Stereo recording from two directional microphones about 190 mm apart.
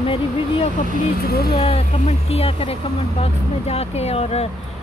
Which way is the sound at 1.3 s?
55° left (ahead or behind).